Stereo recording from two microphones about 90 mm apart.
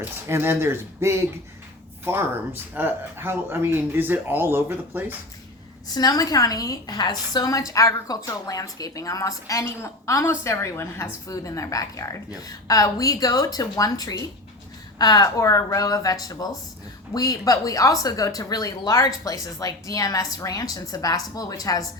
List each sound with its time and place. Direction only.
0.0 s speech: 25° right (ahead or behind)
5.9 s a woman's voice: 45° left (ahead or behind); by 11.1 s 25° left (ahead or behind)
11.3 s a woman's voice: 40° left (ahead or behind)